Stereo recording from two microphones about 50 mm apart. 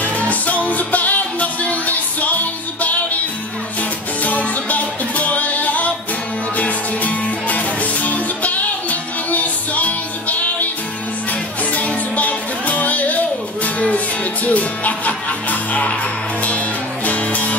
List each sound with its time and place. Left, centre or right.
0.0 s music: left
4.2 s music: left
11.7 s music: left